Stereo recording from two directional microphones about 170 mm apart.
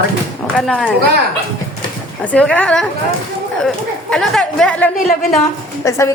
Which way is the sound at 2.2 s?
10° left (ahead or behind).